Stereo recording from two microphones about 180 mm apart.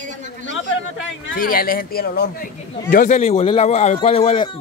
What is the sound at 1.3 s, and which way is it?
Speech, 55° left (ahead or behind).